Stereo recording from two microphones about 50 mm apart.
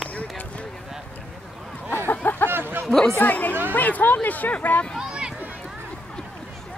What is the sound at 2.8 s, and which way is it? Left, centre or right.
Speech, centre.